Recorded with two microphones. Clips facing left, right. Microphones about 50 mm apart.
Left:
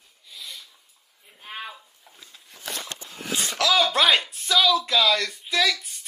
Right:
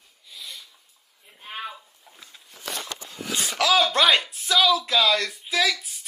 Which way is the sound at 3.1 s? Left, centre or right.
Left.